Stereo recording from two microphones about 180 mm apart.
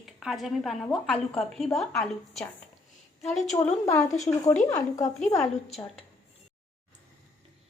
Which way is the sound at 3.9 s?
20° left (ahead or behind).